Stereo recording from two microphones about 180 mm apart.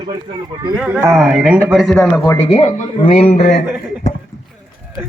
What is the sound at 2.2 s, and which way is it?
Speech, 20° left (ahead or behind).